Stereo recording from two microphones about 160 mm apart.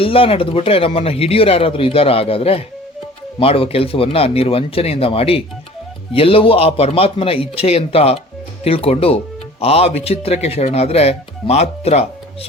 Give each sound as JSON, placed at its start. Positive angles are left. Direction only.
{"t": 0.0, "sound": "speech", "side_deg": 35}